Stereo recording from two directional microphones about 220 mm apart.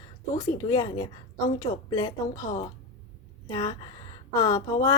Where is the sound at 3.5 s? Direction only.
15° left (ahead or behind).